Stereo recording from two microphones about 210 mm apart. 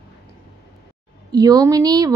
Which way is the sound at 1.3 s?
15° right (ahead or behind).